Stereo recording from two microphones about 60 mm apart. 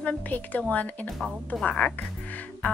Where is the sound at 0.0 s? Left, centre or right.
Left.